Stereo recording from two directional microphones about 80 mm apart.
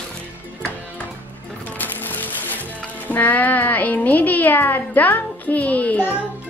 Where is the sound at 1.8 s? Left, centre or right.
Left.